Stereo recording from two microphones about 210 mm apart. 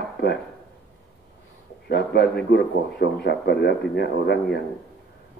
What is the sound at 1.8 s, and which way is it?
Speech, 50° left (ahead or behind).